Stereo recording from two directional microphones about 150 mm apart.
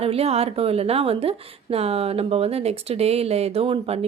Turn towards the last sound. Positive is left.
turn(degrees=-40)  # may be behind; listen again after turning